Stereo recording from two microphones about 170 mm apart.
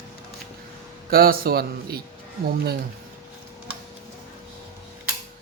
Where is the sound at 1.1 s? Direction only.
60° right (ahead or behind).